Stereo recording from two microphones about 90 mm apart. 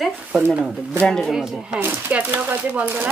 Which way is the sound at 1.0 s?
5° left (ahead or behind).